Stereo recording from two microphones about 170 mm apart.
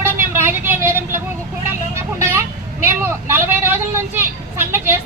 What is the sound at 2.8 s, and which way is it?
Vehicle, 15° right (ahead or behind).